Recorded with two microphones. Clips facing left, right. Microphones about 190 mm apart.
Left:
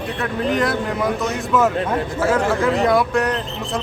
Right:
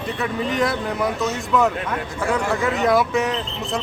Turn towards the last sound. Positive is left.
turn(degrees=0)  # may be behind; listen again after turning